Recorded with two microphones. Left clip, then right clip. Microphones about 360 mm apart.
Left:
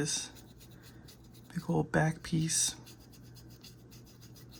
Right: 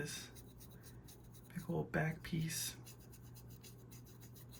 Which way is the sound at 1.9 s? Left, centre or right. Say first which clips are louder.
Left 9 dB; centre.